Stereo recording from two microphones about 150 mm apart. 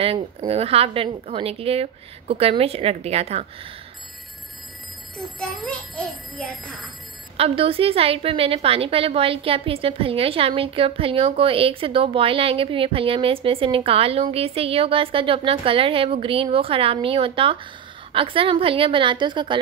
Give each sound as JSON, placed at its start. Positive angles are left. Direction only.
{"t": 0.5, "sound": "a woman's voice", "side_deg": -40}
{"t": 5.1, "sound": "speech", "side_deg": 5}
{"t": 7.3, "sound": "a woman's voice", "side_deg": -40}